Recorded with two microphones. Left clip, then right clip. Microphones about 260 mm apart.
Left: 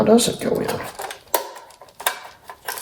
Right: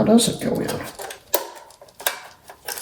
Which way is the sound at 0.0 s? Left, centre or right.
Left.